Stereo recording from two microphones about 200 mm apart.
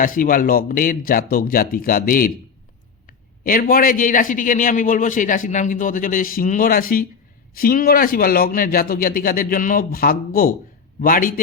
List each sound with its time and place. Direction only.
0.0 s a man's voice: 40° left (ahead or behind)